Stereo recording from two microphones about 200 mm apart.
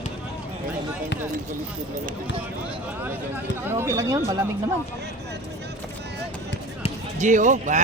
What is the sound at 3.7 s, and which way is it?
Speech, 15° right (ahead or behind).